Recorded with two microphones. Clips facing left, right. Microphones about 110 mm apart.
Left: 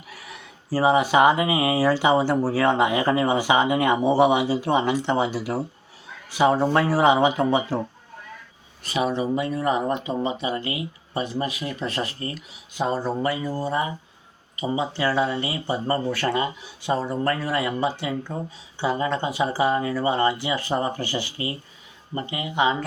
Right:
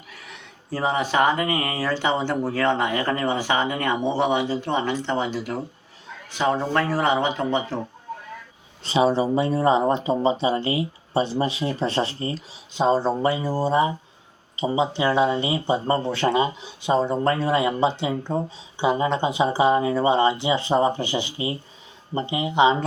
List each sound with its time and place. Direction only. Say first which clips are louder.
0.1 s speech: left 2 dB; 5° left (ahead or behind)
8.8 s speech: right 4 dB; 25° right (ahead or behind)